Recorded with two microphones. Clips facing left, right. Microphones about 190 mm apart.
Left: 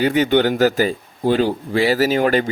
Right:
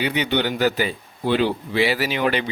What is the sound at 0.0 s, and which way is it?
Speech, 45° left (ahead or behind).